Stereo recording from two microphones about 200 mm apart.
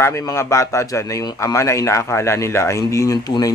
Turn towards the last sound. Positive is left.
turn(degrees=20)  # may be behind; listen again after turning